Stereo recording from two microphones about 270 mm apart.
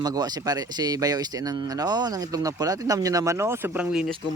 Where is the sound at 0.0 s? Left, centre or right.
Centre.